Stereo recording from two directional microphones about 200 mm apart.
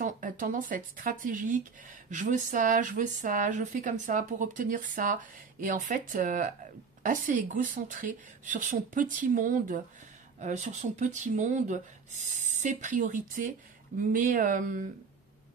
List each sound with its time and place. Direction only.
0.0 s speech: 40° right (ahead or behind)